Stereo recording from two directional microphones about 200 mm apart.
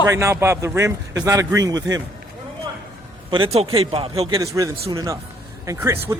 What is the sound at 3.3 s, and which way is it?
A man's voice, 30° right (ahead or behind).